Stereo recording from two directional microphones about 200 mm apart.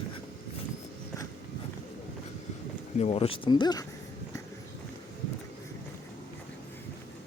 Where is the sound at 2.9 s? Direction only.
30° left (ahead or behind).